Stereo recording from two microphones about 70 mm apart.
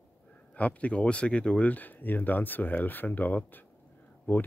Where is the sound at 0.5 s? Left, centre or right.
Left.